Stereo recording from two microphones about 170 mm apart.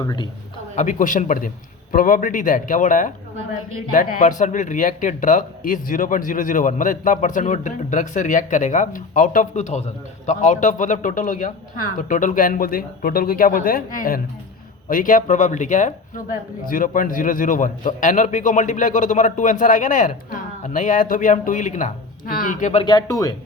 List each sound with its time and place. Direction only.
0.0 s speech: 20° left (ahead or behind)
0.8 s a man's voice: 50° left (ahead or behind)
22.8 s speech: 25° left (ahead or behind)